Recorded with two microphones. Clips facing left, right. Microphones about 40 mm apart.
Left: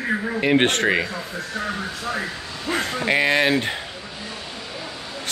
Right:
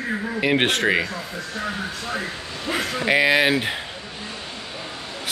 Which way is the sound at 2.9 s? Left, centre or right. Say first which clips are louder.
Right 2 dB; centre.